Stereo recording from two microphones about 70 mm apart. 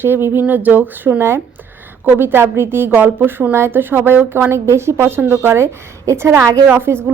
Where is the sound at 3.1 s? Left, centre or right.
Right.